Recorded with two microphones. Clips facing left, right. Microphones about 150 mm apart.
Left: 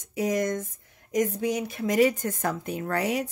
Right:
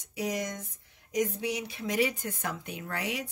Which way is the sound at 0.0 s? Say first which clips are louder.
Left 7 dB; 50° left (ahead or behind).